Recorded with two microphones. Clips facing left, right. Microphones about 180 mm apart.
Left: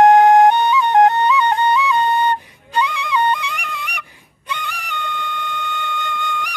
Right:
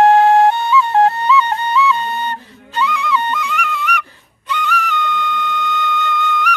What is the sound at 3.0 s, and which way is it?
Music, 15° left (ahead or behind).